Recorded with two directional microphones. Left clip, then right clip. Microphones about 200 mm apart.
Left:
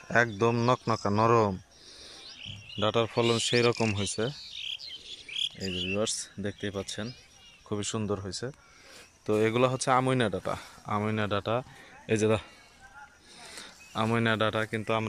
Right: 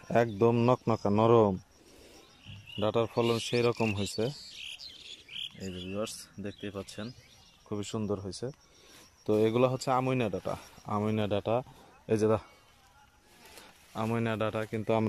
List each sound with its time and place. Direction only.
0.1 s speech: 20° right (ahead or behind)
2.8 s speech: 10° right (ahead or behind)
4.3 s bird: 60° right (ahead or behind)
5.9 s speech: centre (ahead or behind)
13.6 s speech: centre (ahead or behind)